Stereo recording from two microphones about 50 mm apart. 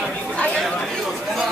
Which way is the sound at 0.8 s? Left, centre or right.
Centre.